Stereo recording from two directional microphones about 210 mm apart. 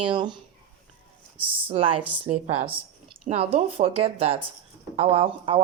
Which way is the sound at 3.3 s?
30° right (ahead or behind).